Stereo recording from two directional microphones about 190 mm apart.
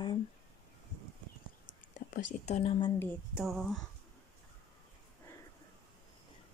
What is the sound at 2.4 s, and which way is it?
Speech, 35° left (ahead or behind).